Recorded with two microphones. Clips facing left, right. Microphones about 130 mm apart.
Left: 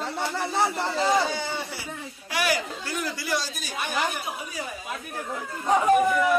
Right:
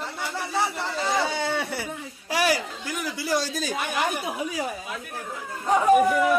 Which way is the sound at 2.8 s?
10° right (ahead or behind).